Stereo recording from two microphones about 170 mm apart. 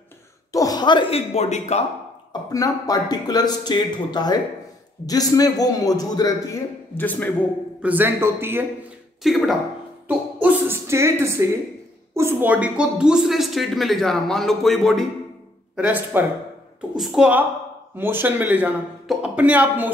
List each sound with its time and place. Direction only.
0.5 s a sound: 20° left (ahead or behind)
1.3 s speech: 40° left (ahead or behind)
2.5 s speech: 20° left (ahead or behind)
7.0 s speech: 10° left (ahead or behind)
7.8 s speech: 10° right (ahead or behind)
9.2 s a woman's voice: centre (ahead or behind)
10.0 s a sound: 10° right (ahead or behind)
12.1 s a woman's voice: 15° right (ahead or behind); by 15.0 s centre (ahead or behind)
15.7 s a woman's voice: 10° right (ahead or behind)